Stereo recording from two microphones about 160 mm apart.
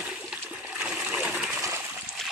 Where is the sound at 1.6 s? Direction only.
15° right (ahead or behind).